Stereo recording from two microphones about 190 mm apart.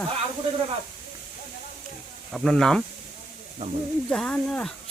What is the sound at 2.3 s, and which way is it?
Speech, centre (ahead or behind).